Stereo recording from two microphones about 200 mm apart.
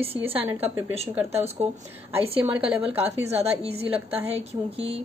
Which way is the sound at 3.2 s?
30° right (ahead or behind).